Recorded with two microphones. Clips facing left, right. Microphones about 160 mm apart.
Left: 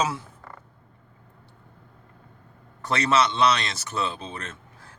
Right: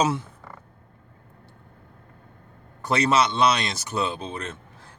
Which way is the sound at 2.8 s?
10° right (ahead or behind).